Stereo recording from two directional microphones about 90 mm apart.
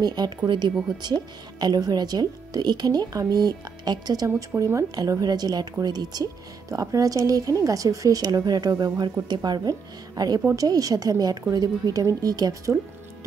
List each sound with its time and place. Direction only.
0.0 s speech: 50° right (ahead or behind)
4.4 s a woman's voice: 35° right (ahead or behind)
4.9 s a woman's voice: 45° right (ahead or behind)